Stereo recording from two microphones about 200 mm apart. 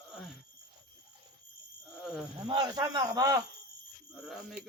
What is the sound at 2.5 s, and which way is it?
Speech, 20° right (ahead or behind).